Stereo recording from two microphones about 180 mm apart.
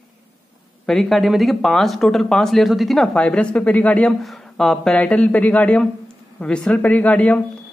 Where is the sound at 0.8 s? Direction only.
Centre (ahead or behind).